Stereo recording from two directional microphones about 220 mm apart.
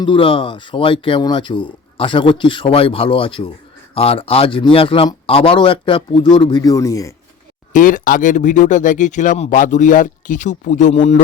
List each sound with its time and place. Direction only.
0.0 s speech: 25° left (ahead or behind)
7.7 s speech: 35° left (ahead or behind)